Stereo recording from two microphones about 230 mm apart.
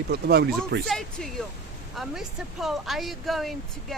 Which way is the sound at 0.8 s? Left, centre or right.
Centre.